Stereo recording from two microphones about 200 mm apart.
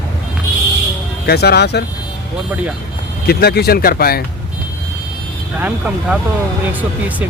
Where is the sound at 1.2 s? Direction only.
55° left (ahead or behind).